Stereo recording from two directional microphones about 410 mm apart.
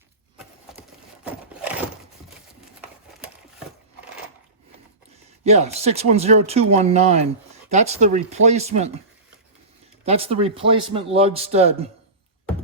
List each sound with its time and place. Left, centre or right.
0.7 s a sound: centre
5.5 s speech: centre
10.1 s speech: centre